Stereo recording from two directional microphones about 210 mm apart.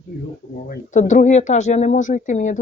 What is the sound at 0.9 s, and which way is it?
Speech, 35° left (ahead or behind).